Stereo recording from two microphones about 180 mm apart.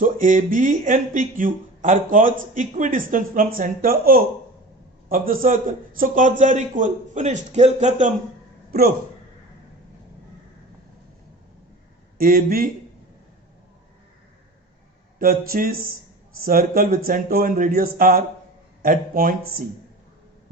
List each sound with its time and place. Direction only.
0.0 s speech: 45° right (ahead or behind)
12.1 s speech: 55° right (ahead or behind)
15.2 s speech: 55° right (ahead or behind)